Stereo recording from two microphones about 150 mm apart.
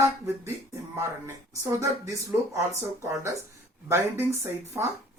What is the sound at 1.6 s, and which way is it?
Speech, 20° right (ahead or behind).